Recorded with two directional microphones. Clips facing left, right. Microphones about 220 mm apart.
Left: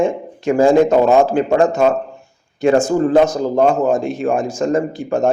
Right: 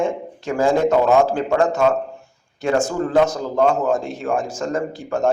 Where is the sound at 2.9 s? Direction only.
20° left (ahead or behind).